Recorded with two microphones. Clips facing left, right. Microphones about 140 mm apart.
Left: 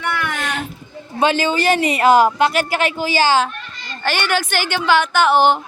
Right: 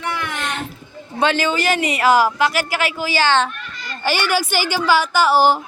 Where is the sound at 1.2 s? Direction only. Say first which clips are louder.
Left 2 dB; 15° left (ahead or behind).